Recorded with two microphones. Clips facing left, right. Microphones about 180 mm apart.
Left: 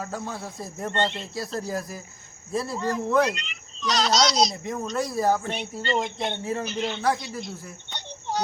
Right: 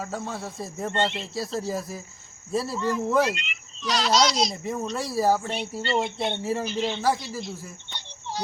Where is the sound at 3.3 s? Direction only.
40° left (ahead or behind).